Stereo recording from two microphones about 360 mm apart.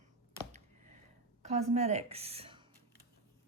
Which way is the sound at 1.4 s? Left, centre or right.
Centre.